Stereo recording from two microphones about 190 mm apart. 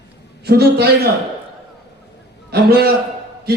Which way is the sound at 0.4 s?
60° right (ahead or behind).